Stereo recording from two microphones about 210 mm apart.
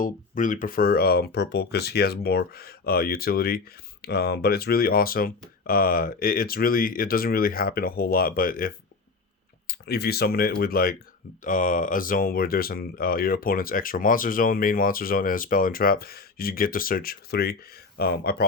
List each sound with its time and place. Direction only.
0.0 s speech: 40° left (ahead or behind)